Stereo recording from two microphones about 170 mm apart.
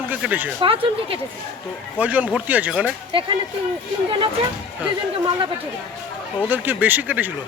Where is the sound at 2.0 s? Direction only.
10° right (ahead or behind).